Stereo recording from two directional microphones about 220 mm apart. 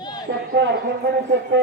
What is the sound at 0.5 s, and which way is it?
Speech, 55° right (ahead or behind).